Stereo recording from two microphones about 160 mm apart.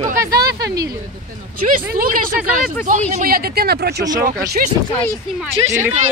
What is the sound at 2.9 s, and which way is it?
Speech, 50° right (ahead or behind).